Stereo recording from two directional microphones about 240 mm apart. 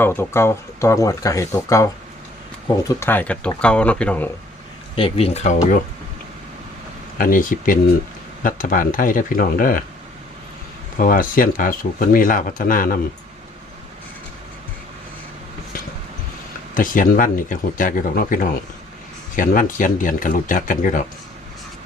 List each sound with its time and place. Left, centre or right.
0.0 s speech: centre
3.0 s speech: centre
4.9 s speech: left
7.2 s speech: left
11.0 s speech: left
16.7 s speech: left